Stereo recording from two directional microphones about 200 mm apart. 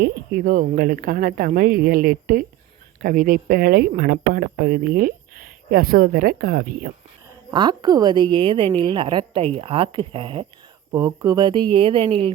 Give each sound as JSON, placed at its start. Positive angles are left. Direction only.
{"t": 0.0, "sound": "speech", "side_deg": -50}
{"t": 7.5, "sound": "a woman's voice", "side_deg": -20}